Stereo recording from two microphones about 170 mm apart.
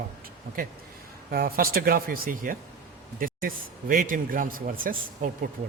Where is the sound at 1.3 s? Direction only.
60° right (ahead or behind).